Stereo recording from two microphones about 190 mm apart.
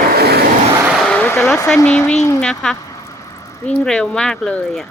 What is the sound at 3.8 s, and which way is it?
Speech, 5° left (ahead or behind).